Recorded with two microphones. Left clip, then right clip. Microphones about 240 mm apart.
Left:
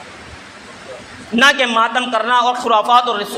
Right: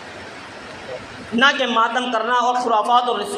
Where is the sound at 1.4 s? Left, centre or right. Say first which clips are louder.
Left 4 dB; left.